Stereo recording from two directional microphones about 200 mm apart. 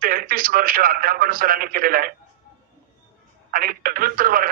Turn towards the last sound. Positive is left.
turn(degrees=-45)  # may be behind; listen again after turning